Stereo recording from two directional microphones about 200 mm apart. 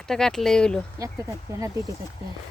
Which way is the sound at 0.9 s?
15° right (ahead or behind).